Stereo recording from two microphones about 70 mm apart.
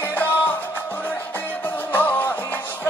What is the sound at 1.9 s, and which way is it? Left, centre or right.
Music, left.